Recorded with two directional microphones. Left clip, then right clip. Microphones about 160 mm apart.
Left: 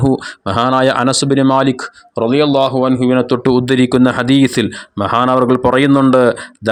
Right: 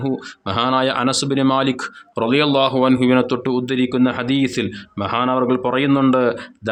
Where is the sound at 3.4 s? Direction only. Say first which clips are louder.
Left 7 dB; 40° left (ahead or behind).